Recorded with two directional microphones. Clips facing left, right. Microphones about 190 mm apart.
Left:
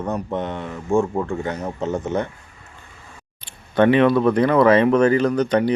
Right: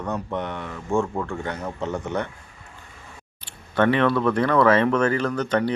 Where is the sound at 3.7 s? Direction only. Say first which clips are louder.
Left 5 dB; 15° left (ahead or behind).